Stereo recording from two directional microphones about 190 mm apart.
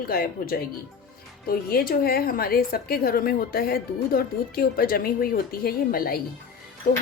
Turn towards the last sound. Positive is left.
turn(degrees=45)  # may be behind; listen again after turning